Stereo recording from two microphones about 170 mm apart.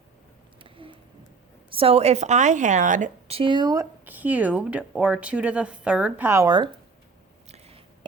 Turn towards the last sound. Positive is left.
turn(degrees=-20)  # may be behind; listen again after turning